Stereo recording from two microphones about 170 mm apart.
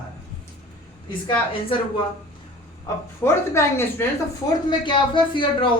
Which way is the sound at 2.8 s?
15° left (ahead or behind).